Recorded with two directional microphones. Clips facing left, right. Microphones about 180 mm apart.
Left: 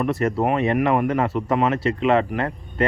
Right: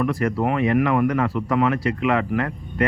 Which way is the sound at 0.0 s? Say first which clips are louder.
Left 1 dB; 25° left (ahead or behind).